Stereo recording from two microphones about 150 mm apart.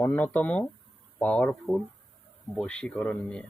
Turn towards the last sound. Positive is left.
turn(degrees=5)  # may be behind; listen again after turning